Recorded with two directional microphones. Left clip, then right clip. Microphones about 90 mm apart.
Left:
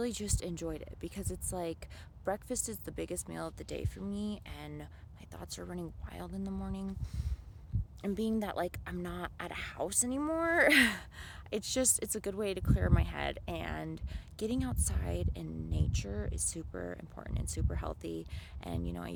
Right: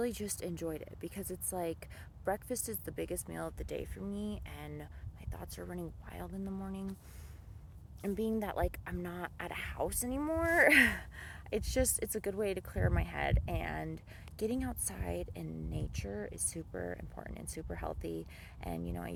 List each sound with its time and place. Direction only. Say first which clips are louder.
0.0 s a woman's voice: even; 30° left (ahead or behind); by 6.8 s 55° left (ahead or behind)
8.0 s a woman's voice: even; 55° left (ahead or behind)